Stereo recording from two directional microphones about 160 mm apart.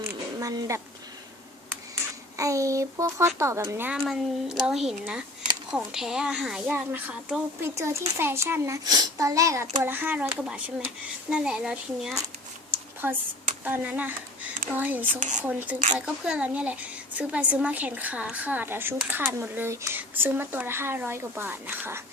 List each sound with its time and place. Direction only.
0.3 s speech: 20° right (ahead or behind)
2.3 s a child's voice: 20° right (ahead or behind)
3.9 s speech: centre (ahead or behind)
7.8 s speech: 15° right (ahead or behind)
12.7 s a sound: 10° right (ahead or behind)
13.7 s speech: 10° right (ahead or behind)